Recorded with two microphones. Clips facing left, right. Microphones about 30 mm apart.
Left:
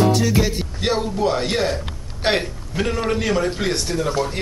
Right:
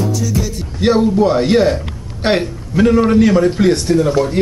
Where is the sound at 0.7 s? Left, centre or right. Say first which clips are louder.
Right 11 dB; centre.